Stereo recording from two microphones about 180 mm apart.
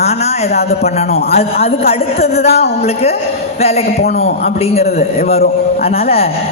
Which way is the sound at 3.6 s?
35° left (ahead or behind).